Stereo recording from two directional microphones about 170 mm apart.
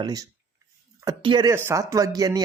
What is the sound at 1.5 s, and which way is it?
Speech, 15° right (ahead or behind).